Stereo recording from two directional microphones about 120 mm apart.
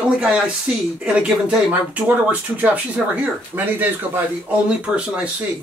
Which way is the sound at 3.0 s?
Centre (ahead or behind).